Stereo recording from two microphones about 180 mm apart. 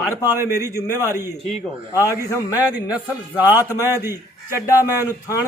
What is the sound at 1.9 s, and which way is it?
Speech, 20° left (ahead or behind).